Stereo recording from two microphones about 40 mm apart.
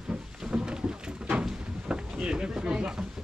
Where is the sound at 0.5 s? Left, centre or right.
Right.